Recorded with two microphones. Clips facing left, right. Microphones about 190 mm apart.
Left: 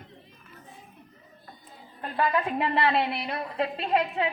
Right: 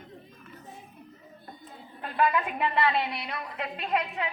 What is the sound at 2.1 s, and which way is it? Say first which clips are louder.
A woman's voice: left 1 dB; 30° left (ahead or behind).